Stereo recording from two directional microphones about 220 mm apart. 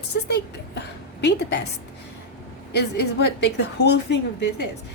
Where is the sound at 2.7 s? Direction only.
50° left (ahead or behind).